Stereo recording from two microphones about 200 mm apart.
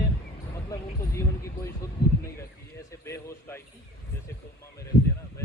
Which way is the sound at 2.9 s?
15° left (ahead or behind).